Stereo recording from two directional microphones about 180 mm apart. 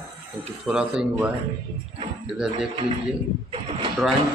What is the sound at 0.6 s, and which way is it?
Speech, 5° right (ahead or behind).